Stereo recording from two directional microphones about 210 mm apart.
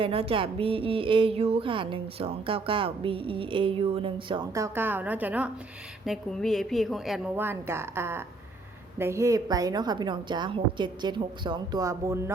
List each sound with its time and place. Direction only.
0.0 s a woman's voice: 25° right (ahead or behind)